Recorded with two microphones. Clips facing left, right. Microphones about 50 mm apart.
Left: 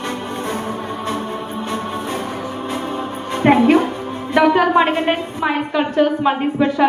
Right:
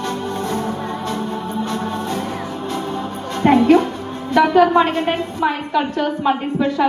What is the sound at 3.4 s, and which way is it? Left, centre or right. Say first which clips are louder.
Music: even; centre.